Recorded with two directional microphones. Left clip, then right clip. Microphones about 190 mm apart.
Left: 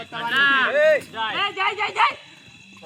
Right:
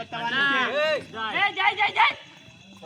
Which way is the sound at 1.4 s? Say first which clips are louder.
Right 2 dB; 40° right (ahead or behind).